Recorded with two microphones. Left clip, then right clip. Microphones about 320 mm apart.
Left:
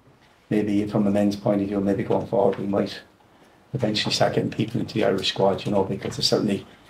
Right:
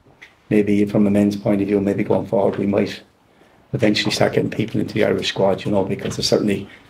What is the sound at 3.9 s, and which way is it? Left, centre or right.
Speech, right.